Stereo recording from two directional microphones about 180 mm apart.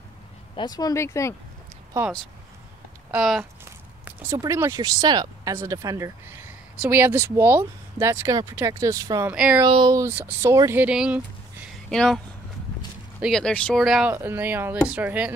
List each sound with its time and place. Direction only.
0.6 s speech: 20° left (ahead or behind)
3.1 s speech: 5° right (ahead or behind)
4.0 s speech: 15° right (ahead or behind)
9.3 s speech: 5° right (ahead or behind)
9.7 s speech: 25° right (ahead or behind); by 12.2 s 5° left (ahead or behind)
13.2 s speech: 5° left (ahead or behind)
14.1 s speech: 10° right (ahead or behind)